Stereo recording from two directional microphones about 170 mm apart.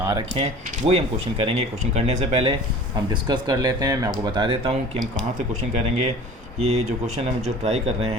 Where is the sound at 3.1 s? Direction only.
25° right (ahead or behind).